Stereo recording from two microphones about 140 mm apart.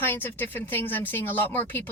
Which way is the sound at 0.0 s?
15° left (ahead or behind).